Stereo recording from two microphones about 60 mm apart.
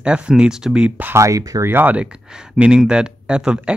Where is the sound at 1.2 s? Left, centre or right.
Right.